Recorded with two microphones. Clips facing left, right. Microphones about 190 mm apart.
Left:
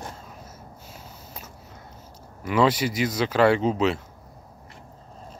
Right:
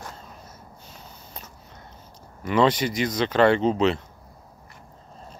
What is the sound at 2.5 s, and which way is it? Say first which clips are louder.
Speech: right 1 dB; 5° left (ahead or behind).